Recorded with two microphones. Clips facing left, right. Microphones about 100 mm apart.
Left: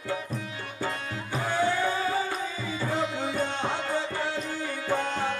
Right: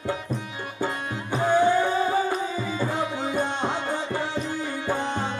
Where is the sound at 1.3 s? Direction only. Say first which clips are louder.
Right 7 dB; 20° right (ahead or behind).